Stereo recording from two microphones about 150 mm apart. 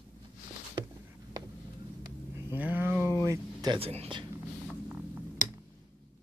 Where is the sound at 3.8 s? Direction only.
40° right (ahead or behind).